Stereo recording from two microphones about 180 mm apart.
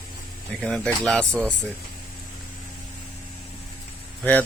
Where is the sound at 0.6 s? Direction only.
Centre (ahead or behind).